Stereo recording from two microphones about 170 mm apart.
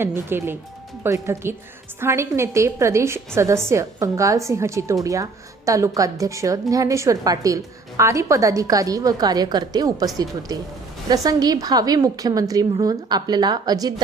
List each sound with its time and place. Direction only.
0.0 s a woman's voice: 15° right (ahead or behind)
11.1 s a woman's voice: 20° right (ahead or behind)